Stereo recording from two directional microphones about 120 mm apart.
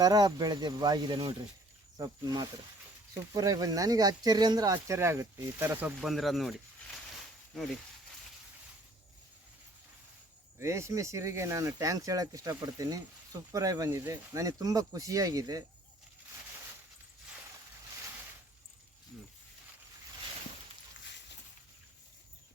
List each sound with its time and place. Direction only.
0.0 s speech: 35° right (ahead or behind); by 5.9 s 20° right (ahead or behind)
6.0 s speech: centre (ahead or behind)
10.6 s speech: 25° right (ahead or behind)